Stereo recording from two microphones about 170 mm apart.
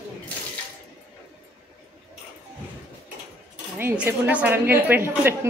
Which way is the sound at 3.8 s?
10° right (ahead or behind).